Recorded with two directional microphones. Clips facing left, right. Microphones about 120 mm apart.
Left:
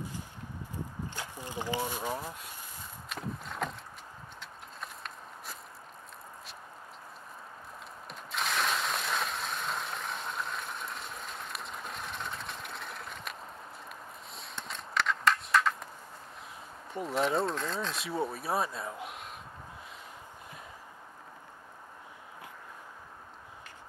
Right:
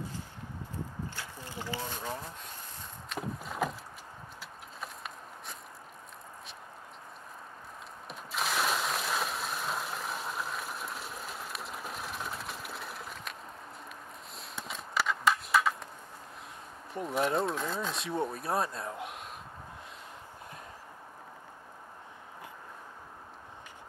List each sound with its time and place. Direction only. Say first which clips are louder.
1.4 s speech: left 5 dB; 15° left (ahead or behind)
3.1 s vehicle: right 2 dB; centre (ahead or behind)
4.4 s a sound: right 1 dB; 5° right (ahead or behind)
8.1 s mechanisms: right 1 dB; 5° right (ahead or behind)
14.3 s a sound: right 1 dB; centre (ahead or behind)
16.9 s speech: even; centre (ahead or behind)